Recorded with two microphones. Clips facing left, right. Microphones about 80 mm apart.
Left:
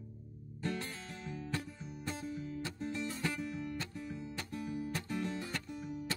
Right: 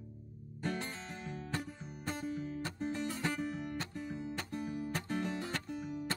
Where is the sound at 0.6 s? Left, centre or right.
Right.